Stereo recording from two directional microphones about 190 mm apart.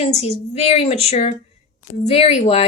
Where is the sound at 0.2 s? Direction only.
35° left (ahead or behind).